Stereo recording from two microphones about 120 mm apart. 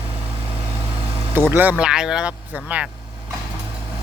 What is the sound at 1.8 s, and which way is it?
Speech, 5° right (ahead or behind).